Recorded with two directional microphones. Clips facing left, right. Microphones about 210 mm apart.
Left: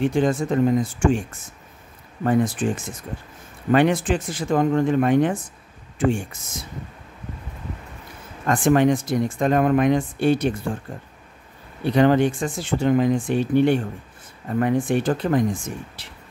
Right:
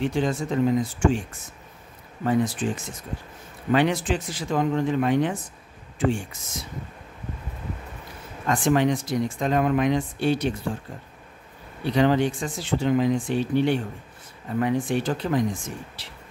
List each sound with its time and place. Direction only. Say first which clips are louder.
0.0 s speech: left 4 dB; 50° left (ahead or behind)
2.2 s speech: left 3 dB; 50° left (ahead or behind)
8.5 s speech: left 4 dB; 50° left (ahead or behind)
11.8 s speech: left 4 dB; 50° left (ahead or behind)